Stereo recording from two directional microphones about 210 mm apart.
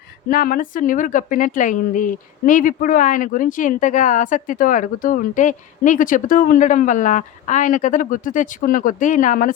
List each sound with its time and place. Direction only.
0.3 s a woman's voice: 40° left (ahead or behind)